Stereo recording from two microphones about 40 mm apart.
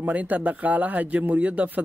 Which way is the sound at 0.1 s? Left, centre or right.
Right.